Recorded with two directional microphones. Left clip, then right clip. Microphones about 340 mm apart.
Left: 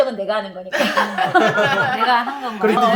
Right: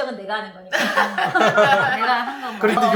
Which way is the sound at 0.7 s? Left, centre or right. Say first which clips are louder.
Left 1 dB; centre.